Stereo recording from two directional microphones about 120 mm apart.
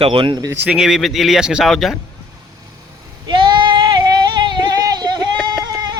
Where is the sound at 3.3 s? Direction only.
40° right (ahead or behind).